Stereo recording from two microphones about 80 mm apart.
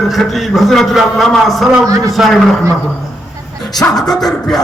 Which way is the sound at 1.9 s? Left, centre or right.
Right.